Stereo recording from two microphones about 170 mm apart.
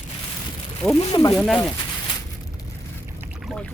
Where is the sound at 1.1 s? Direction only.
20° left (ahead or behind).